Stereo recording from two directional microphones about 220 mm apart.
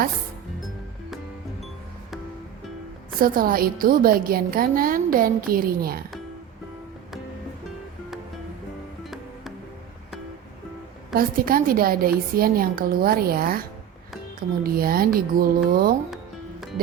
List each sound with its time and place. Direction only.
3.2 s a woman's voice: 40° right (ahead or behind)
11.1 s a woman's voice: 40° right (ahead or behind)
14.6 s speech: 40° right (ahead or behind)
16.0 s music: centre (ahead or behind)